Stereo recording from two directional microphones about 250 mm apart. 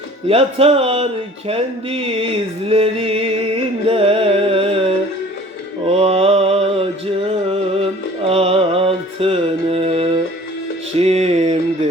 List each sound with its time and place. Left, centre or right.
0.3 s speech: right
5.8 s mantra: right
7.3 s music: right
10.9 s a sound: right